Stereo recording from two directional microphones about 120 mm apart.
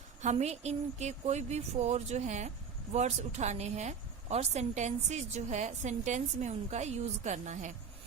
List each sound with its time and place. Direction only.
0.2 s a woman's voice: 75° right (ahead or behind)